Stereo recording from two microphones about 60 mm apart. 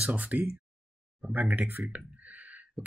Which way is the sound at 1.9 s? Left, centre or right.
Right.